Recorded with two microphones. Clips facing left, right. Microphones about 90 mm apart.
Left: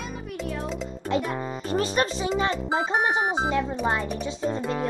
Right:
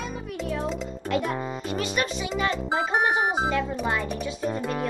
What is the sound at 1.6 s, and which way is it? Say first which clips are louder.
Music: left 5 dB; 35° left (ahead or behind).